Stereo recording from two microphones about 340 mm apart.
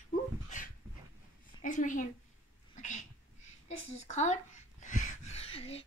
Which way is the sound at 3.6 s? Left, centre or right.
Centre.